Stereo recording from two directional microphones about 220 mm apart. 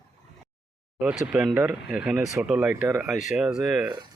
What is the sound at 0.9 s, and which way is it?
Speech, 5° right (ahead or behind).